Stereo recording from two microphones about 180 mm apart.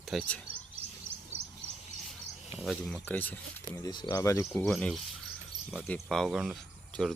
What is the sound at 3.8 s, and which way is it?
Speech, 20° left (ahead or behind).